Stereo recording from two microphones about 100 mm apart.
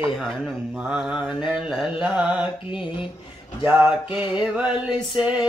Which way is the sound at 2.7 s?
55° left (ahead or behind).